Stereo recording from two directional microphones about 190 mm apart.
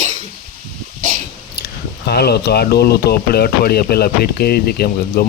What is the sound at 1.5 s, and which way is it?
Speech, 55° left (ahead or behind).